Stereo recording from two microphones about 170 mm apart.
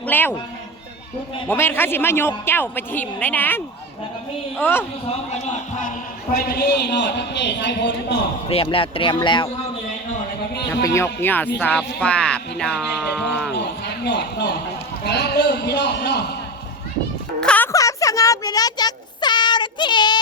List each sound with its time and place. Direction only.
0.0 s speech: 10° left (ahead or behind)
1.5 s speech: 15° left (ahead or behind)
4.6 s speech: 10° left (ahead or behind)
5.3 s speech: 45° left (ahead or behind)
6.3 s a man's voice: 65° left (ahead or behind); by 7.9 s 90° left
8.4 s speech: 35° left (ahead or behind)
10.8 s speech: 15° left (ahead or behind)
13.5 s a sound: 85° left
15.0 s a sound: 80° left
17.4 s music: 10° left (ahead or behind)
17.7 s a sound: 20° left (ahead or behind)